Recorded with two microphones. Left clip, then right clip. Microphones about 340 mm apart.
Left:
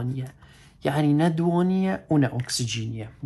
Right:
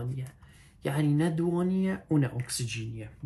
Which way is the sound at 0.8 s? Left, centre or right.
Left.